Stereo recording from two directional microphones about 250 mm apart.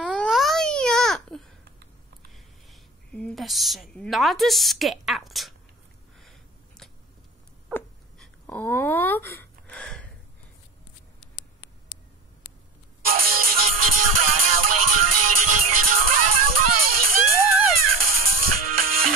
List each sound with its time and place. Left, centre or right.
0.0 s baby cry: centre
2.3 s a woman's voice: centre
7.7 s a sound: centre
13.0 s music: right